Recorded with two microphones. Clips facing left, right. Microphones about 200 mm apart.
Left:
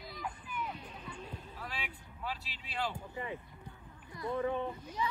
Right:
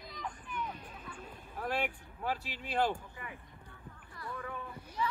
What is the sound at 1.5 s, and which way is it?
Speech, 60° right (ahead or behind).